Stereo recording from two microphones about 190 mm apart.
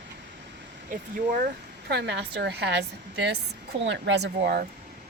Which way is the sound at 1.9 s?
65° right (ahead or behind).